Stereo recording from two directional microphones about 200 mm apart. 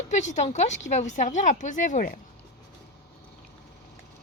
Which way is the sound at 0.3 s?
35° left (ahead or behind).